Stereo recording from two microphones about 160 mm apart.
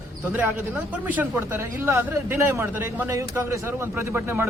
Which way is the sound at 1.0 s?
10° right (ahead or behind).